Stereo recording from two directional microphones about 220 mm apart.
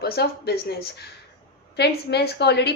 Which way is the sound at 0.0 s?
45° left (ahead or behind).